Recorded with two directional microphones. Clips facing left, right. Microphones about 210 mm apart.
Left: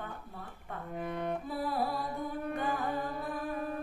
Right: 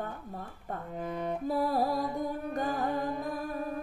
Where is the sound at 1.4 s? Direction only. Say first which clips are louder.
Right 5 dB; 40° right (ahead or behind).